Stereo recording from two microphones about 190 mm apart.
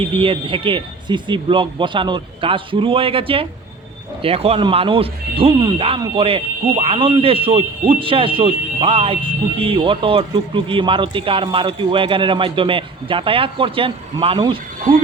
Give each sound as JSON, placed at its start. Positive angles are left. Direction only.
{"t": 0.0, "sound": "speech", "side_deg": -30}